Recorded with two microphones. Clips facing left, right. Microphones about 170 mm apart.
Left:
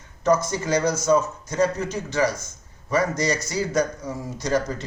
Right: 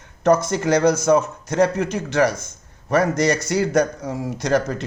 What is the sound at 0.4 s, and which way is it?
A man's voice, 65° right (ahead or behind).